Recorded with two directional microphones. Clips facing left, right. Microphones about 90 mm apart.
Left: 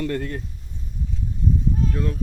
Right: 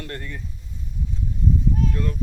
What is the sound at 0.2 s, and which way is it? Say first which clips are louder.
Speech: left 7 dB; 60° left (ahead or behind).